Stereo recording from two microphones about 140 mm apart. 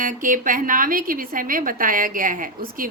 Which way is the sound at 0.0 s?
70° right (ahead or behind).